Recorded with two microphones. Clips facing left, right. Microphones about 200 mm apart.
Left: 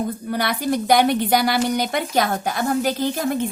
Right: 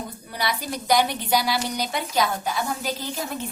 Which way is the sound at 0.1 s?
55° left (ahead or behind).